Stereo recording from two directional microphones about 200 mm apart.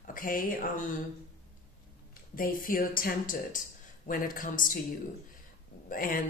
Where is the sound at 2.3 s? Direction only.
45° left (ahead or behind).